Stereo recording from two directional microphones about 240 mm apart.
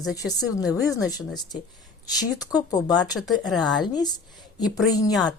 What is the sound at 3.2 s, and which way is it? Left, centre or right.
Speech, centre.